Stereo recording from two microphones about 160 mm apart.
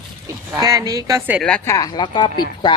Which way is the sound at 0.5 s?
20° right (ahead or behind).